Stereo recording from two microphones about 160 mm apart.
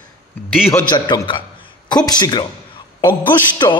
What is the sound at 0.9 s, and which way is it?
A man's voice, 30° left (ahead or behind).